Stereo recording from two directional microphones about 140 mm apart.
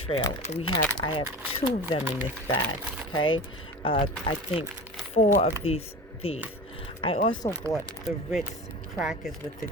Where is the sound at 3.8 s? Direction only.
40° left (ahead or behind).